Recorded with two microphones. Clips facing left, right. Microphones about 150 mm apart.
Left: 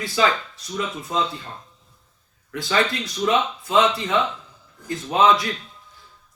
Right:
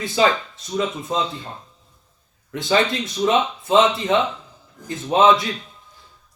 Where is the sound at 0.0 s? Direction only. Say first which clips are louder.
Right 3 dB; 25° right (ahead or behind).